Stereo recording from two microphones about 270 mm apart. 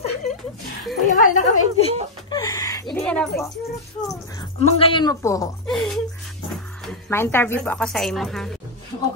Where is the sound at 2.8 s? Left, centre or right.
Centre.